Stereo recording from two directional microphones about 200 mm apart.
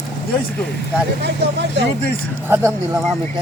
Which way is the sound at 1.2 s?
60° right (ahead or behind).